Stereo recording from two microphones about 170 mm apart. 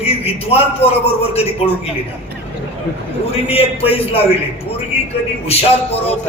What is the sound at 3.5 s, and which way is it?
Speech, 35° left (ahead or behind).